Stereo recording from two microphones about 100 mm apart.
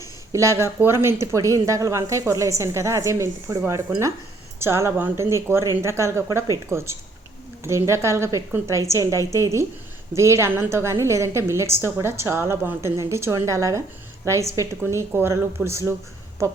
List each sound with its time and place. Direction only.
0.3 s a woman's voice: 30° right (ahead or behind)